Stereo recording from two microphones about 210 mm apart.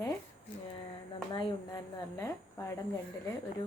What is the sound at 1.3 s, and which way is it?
Speech, 20° left (ahead or behind).